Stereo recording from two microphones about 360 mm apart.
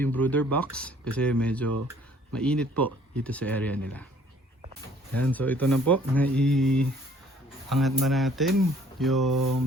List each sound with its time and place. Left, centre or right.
0.0 s speech: centre
5.1 s speech: centre
9.3 s mantra: right